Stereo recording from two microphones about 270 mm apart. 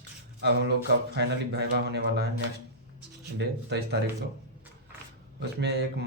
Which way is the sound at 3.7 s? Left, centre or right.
Right.